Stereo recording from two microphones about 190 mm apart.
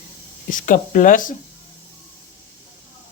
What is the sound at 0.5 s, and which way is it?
Speech, 45° left (ahead or behind).